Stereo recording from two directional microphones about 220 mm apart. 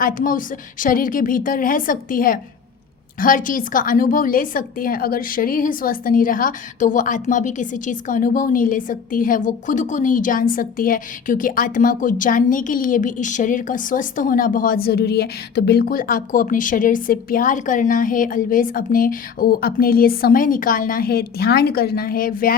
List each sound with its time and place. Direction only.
0.0 s a woman's voice: 40° left (ahead or behind)